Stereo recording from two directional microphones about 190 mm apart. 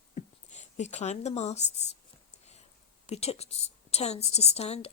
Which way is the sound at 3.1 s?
35° left (ahead or behind).